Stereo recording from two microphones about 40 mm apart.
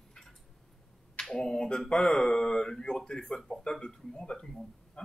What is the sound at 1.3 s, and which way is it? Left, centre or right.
Speech, centre.